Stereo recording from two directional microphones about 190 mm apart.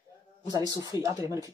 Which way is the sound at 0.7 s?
20° right (ahead or behind).